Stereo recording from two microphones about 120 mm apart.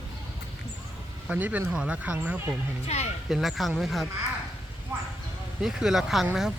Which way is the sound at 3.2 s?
Centre (ahead or behind).